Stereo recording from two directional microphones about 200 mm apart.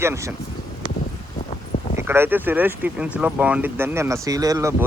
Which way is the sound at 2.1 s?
10° right (ahead or behind).